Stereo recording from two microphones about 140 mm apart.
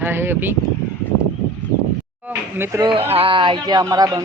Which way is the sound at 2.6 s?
20° right (ahead or behind).